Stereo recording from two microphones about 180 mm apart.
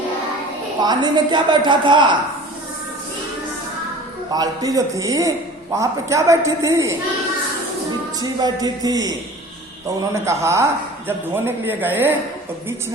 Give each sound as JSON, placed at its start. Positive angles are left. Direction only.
{"t": 0.8, "sound": "a woman's voice", "side_deg": -25}
{"t": 4.3, "sound": "a woman's voice", "side_deg": -20}
{"t": 8.2, "sound": "a woman's voice", "side_deg": -20}
{"t": 10.2, "sound": "a woman's voice", "side_deg": -15}